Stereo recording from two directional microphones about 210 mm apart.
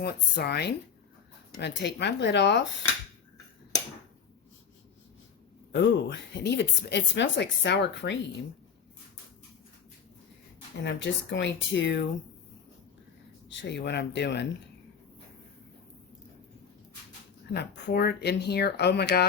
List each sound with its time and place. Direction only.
0.0 s speech: 50° left (ahead or behind)
5.7 s speech: 60° left (ahead or behind)
10.8 s speech: 55° left (ahead or behind)
13.5 s speech: 60° left (ahead or behind)
17.5 s speech: 50° left (ahead or behind)